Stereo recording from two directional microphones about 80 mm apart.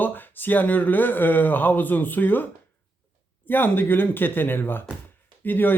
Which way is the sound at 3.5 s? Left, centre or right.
Left.